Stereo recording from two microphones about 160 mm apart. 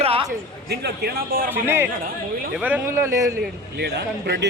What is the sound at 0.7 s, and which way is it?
Speech, 90° right.